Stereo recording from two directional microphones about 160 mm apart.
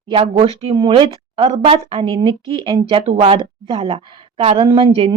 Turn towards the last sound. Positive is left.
turn(degrees=-35)  # may be behind; listen again after turning